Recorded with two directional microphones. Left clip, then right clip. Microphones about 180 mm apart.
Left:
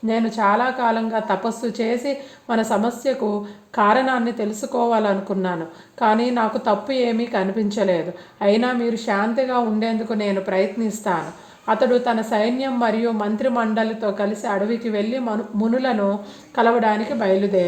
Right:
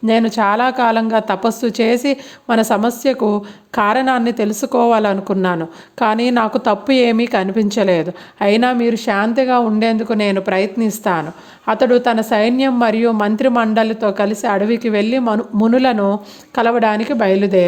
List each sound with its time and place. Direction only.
0.1 s a woman's voice: 30° right (ahead or behind)